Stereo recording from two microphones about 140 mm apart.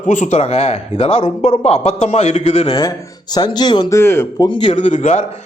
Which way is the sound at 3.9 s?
20° left (ahead or behind).